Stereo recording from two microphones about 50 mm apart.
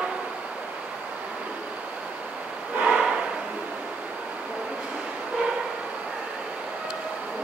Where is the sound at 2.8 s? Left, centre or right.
Right.